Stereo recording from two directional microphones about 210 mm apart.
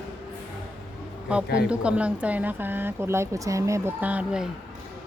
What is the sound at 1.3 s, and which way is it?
Speech, 5° right (ahead or behind).